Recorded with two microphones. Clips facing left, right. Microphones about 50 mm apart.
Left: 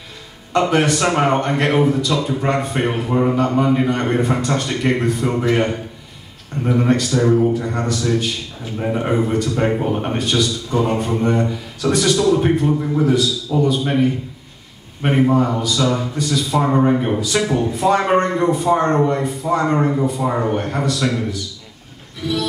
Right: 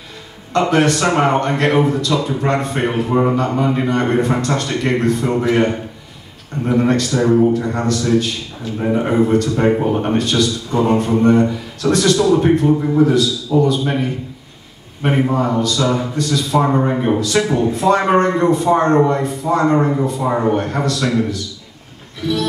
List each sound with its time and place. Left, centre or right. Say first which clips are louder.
0.6 s a man's voice: right 1 dB; centre
7.8 s a man's voice: right 4 dB; centre
17.2 s a man's voice: right 3 dB; centre
17.5 s speech: right 3 dB; centre
17.7 s a man's voice: right 1 dB; centre